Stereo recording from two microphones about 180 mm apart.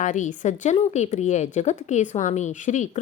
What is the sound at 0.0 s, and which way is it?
A woman's voice, 45° left (ahead or behind).